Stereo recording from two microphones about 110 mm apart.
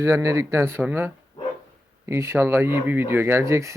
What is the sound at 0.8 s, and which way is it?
Speech, 15° right (ahead or behind).